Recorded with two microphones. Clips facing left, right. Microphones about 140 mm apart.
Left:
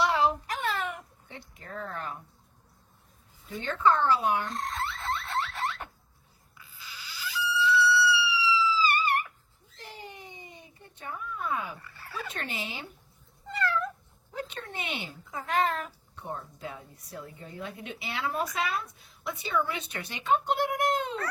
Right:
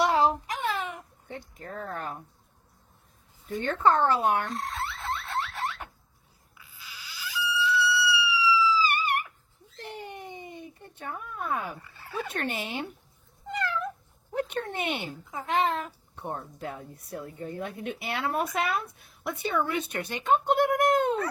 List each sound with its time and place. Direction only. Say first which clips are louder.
0.0 s a sound: right 2 dB; 40° right (ahead or behind)
0.4 s a sound: right 1 dB; 15° right (ahead or behind)
1.3 s a woman's voice: right 4 dB; 45° right (ahead or behind)
3.6 s a woman's voice: right 2 dB; 50° right (ahead or behind)
4.5 s a sound: even; 5° right (ahead or behind)
9.7 s a sound: right 5 dB; 60° right (ahead or behind)
11.8 s speech: right 4 dB; 20° right (ahead or behind)
12.3 s speech: right 6 dB; 55° right (ahead or behind)
13.5 s cat: left 1 dB; 15° right (ahead or behind)
14.3 s speech: right 7 dB; 60° right (ahead or behind)
15.3 s a woman's voice: right 1 dB; 20° right (ahead or behind)
16.1 s a woman's voice: right 3 dB; 55° right (ahead or behind)